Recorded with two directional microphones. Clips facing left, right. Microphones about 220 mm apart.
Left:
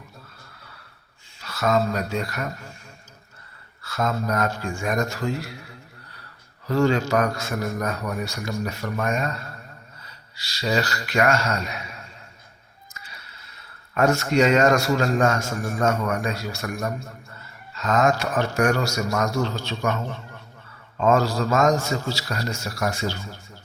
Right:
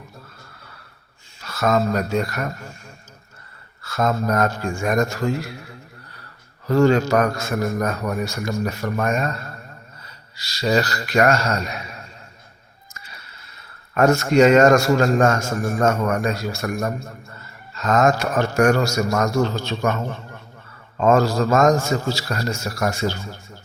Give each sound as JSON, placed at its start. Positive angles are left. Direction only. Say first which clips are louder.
{"t": 1.4, "sound": "speech", "louder": "right 2 dB", "side_deg": -50}
{"t": 3.8, "sound": "a man's voice", "louder": "right 4 dB", "side_deg": -45}
{"t": 6.7, "sound": "a man's voice", "louder": "right 4 dB", "side_deg": -45}
{"t": 10.3, "sound": "speech", "louder": "right 4 dB", "side_deg": -40}
{"t": 13.9, "sound": "a man's voice", "louder": "right 4 dB", "side_deg": -45}
{"t": 21.0, "sound": "a man's voice", "louder": "right 3 dB", "side_deg": -45}